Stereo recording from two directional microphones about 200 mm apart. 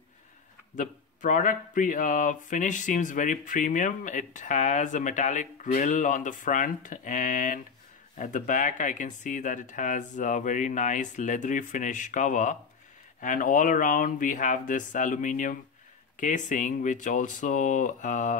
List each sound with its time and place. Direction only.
0.7 s speech: 40° left (ahead or behind)